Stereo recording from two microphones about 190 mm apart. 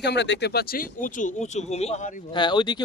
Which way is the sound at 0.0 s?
65° left (ahead or behind).